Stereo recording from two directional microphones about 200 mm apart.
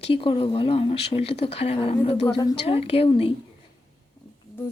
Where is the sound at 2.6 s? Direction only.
30° left (ahead or behind).